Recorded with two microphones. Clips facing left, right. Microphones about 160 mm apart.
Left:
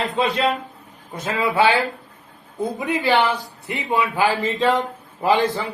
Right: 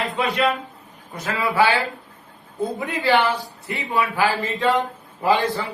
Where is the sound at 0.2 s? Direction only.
25° left (ahead or behind).